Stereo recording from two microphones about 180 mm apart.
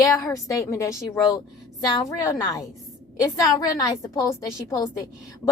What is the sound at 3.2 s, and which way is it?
A woman's voice, 20° left (ahead or behind).